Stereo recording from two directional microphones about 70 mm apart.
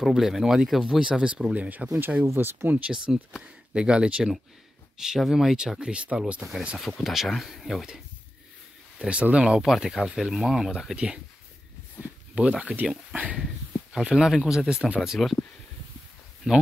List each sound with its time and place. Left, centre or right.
0.0 s speech: centre; by 2.8 s right
2.9 s speech: centre
6.8 s speech: centre
8.9 s speech: centre
9.6 s speech: centre
12.4 s speech: centre
13.9 s speech: centre